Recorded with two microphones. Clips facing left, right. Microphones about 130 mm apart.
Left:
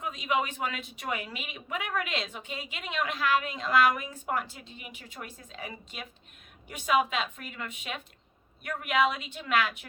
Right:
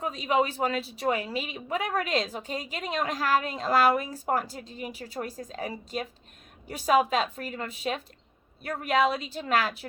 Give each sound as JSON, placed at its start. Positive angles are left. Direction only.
{"t": 0.0, "sound": "speech", "side_deg": -35}